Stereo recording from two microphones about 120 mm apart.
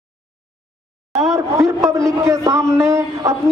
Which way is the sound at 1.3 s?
25° right (ahead or behind).